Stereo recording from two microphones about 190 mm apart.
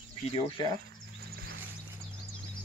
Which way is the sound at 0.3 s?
30° left (ahead or behind).